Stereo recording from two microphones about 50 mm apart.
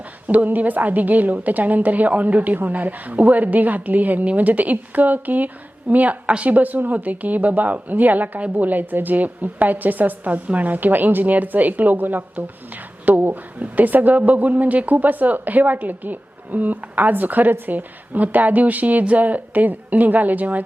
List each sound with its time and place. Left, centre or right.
0.3 s a woman's voice: right